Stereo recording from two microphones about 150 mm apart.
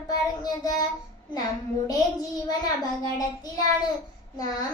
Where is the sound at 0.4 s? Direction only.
25° left (ahead or behind).